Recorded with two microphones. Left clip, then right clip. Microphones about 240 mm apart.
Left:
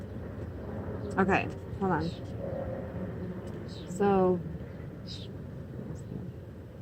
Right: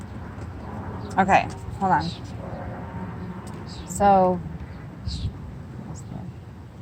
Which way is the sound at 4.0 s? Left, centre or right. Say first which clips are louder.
Right 9 dB; right.